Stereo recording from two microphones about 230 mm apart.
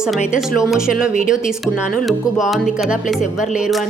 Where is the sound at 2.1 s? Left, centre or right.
Centre.